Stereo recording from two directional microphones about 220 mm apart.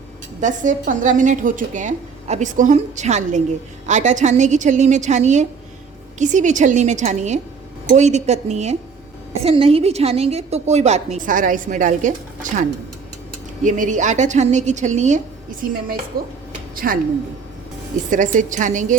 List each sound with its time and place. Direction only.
0.4 s a woman's voice: 35° right (ahead or behind)
18.1 s a woman's voice: 35° right (ahead or behind)